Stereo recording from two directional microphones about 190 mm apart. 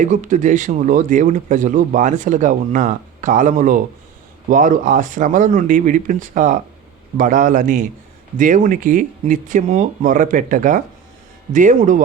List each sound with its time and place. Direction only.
0.0 s speech: 40° right (ahead or behind)